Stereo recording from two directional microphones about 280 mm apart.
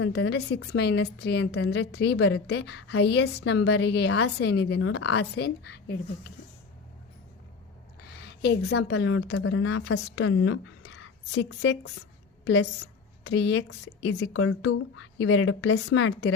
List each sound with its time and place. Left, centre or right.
0.0 s a woman's voice: left
8.1 s a woman's voice: left